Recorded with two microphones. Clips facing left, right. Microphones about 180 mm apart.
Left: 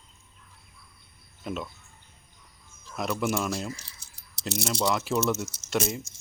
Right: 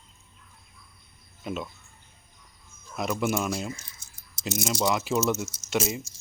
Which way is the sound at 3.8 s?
75° left (ahead or behind).